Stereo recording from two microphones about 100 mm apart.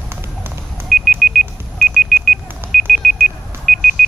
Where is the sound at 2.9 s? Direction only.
Centre (ahead or behind).